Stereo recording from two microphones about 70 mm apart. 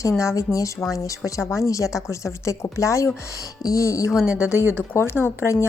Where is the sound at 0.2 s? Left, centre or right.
Left.